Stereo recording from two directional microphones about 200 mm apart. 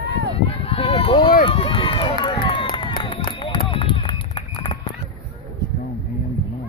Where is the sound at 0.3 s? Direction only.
30° left (ahead or behind).